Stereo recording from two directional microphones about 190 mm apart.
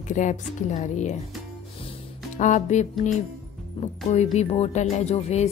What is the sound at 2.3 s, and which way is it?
Speech, 40° left (ahead or behind).